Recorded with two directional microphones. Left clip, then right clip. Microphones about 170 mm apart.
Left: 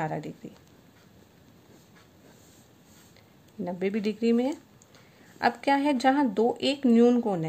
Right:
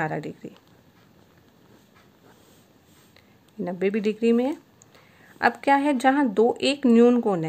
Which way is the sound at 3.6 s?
10° right (ahead or behind).